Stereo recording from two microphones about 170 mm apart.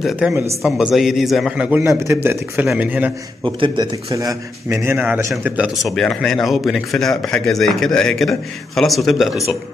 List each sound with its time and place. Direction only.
0.0 s a man's voice: 5° right (ahead or behind)
3.4 s a man's voice: 30° right (ahead or behind)
4.8 s a man's voice: 10° right (ahead or behind)